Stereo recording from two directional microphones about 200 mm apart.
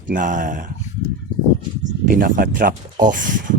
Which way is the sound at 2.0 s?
45° right (ahead or behind).